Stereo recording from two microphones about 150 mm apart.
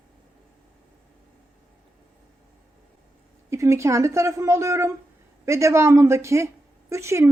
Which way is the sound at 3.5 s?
20° right (ahead or behind).